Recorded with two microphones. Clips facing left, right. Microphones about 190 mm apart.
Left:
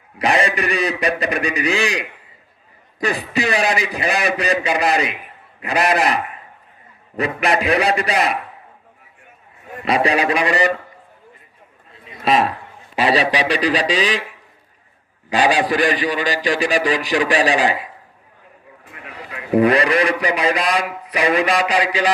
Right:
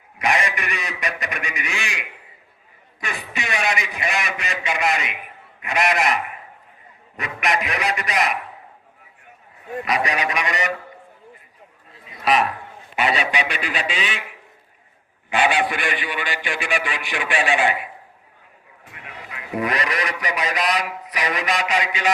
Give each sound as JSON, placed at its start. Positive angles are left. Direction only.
{"t": 0.2, "sound": "a man's voice", "side_deg": 35}
{"t": 9.8, "sound": "a man's voice", "side_deg": 30}
{"t": 12.2, "sound": "a man's voice", "side_deg": 25}
{"t": 15.3, "sound": "a man's voice", "side_deg": 35}
{"t": 19.0, "sound": "a man's voice", "side_deg": 30}